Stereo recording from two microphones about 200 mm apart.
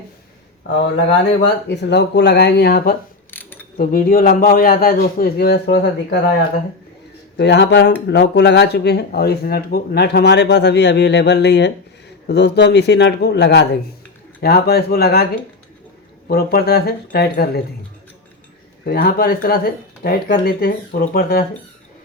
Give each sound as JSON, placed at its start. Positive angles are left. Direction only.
{"t": 1.6, "sound": "speech", "side_deg": 55}
{"t": 3.3, "sound": "pulleys", "side_deg": 10}
{"t": 3.8, "sound": "speech", "side_deg": 45}
{"t": 7.3, "sound": "speech", "side_deg": 60}
{"t": 18.9, "sound": "speech", "side_deg": 50}